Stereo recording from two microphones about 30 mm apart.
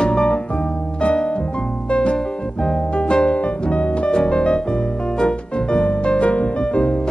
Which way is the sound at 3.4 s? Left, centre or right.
Left.